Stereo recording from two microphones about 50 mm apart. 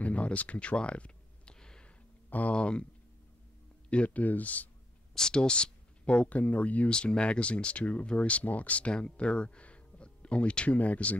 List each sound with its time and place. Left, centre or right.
0.0 s a sound: left
2.2 s a sound: left
2.5 s speech: left
3.9 s speech: left
5.1 s speech: centre; by 6.9 s left
6.9 s speech: centre